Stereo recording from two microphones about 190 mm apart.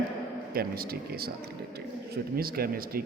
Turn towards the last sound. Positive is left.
turn(degrees=-50)  # may be behind; listen again after turning